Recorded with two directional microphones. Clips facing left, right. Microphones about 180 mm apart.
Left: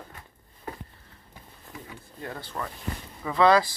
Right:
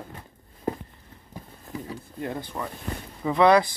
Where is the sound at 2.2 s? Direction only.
15° right (ahead or behind).